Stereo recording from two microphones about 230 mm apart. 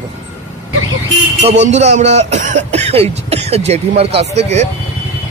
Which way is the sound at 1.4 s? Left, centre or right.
Right.